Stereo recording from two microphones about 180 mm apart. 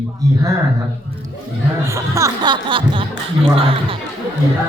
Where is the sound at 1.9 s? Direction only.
15° right (ahead or behind).